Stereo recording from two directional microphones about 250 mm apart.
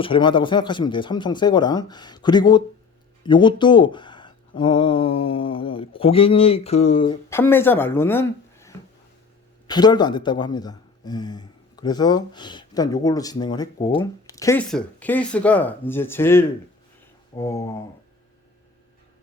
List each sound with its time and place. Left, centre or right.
0.0 s speech: centre
7.3 s speech: centre